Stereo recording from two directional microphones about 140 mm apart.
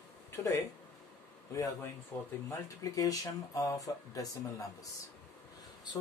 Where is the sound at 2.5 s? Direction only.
25° left (ahead or behind).